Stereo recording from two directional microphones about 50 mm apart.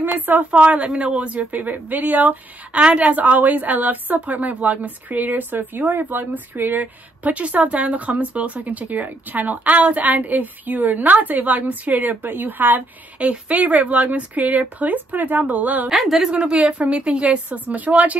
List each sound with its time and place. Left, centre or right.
0.0 s a woman's voice: right
0.5 s a woman's voice: right
2.8 s a woman's voice: right
15.9 s a woman's voice: centre
16.3 s a woman's voice: centre